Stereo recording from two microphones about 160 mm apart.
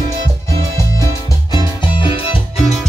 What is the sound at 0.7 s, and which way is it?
Music, 20° left (ahead or behind).